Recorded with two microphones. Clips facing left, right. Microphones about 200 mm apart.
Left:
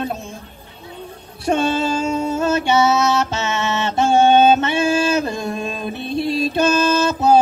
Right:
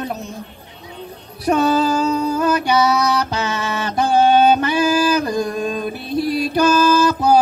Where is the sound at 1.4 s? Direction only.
25° left (ahead or behind).